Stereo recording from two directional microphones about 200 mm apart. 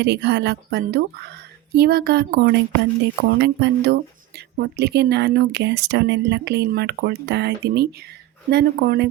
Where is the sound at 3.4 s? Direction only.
60° right (ahead or behind).